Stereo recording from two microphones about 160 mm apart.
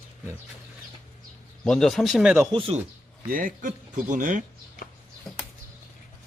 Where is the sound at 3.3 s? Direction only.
60° right (ahead or behind).